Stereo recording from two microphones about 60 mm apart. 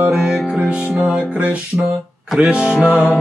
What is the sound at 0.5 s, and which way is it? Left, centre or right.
Music, centre.